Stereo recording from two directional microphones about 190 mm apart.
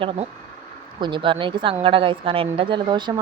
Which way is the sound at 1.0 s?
25° right (ahead or behind).